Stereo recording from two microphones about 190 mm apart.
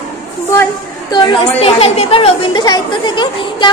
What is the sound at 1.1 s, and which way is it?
A woman's voice, 25° left (ahead or behind).